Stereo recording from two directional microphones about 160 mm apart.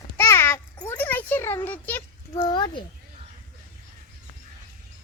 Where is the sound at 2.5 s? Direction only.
30° left (ahead or behind).